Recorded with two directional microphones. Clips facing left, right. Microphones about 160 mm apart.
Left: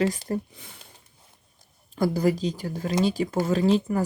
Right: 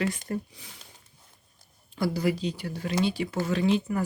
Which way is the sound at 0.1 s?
35° left (ahead or behind).